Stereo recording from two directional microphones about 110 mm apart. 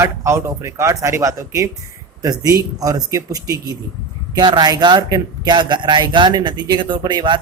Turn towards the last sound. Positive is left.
turn(degrees=-40)  # may be behind; listen again after turning